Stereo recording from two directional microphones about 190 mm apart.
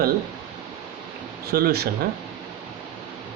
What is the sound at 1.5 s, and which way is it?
Speech, 55° right (ahead or behind).